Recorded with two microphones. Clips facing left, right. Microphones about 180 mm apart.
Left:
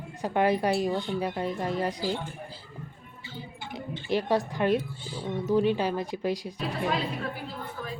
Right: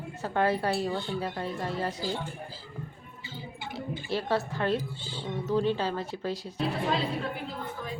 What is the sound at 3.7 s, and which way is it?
Speech, 15° left (ahead or behind).